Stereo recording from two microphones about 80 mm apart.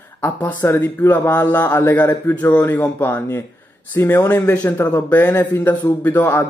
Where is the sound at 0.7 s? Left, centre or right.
Left.